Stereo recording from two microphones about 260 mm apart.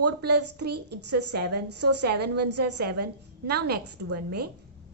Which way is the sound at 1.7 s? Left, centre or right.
Right.